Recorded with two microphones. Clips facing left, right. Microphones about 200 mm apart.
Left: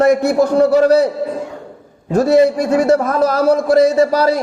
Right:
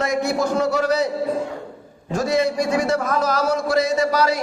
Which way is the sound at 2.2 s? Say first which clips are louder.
Left 8 dB; 60° left (ahead or behind).